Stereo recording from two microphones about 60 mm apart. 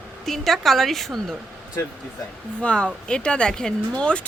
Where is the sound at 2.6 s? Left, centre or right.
Centre.